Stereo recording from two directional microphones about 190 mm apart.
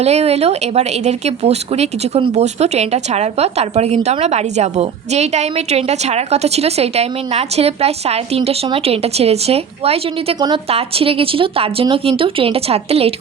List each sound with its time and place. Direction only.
0.0 s a woman's voice: 35° right (ahead or behind)